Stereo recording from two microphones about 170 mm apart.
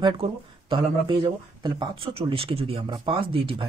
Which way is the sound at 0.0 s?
30° right (ahead or behind).